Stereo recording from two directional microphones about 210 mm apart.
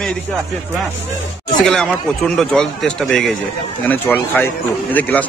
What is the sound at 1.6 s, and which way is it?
A man's voice, 5° left (ahead or behind).